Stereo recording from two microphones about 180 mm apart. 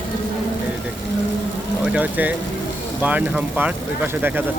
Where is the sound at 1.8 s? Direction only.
5° right (ahead or behind).